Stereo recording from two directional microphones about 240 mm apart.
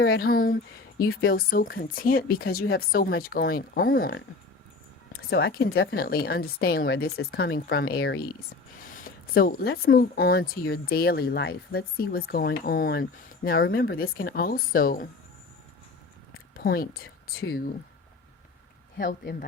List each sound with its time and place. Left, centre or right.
0.0 s speech: left
5.3 s speech: left
8.9 s a sound: left
9.8 s speech: left
16.6 s speech: left
18.9 s speech: left